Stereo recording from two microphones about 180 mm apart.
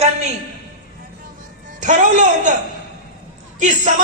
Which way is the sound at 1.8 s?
45° right (ahead or behind).